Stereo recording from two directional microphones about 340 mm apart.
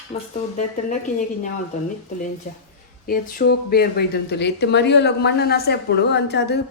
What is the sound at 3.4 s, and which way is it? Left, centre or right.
Speech, left.